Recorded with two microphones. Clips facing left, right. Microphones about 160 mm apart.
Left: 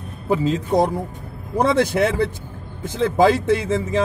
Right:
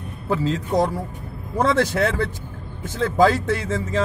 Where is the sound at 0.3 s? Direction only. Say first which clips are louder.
Left 3 dB; 15° left (ahead or behind).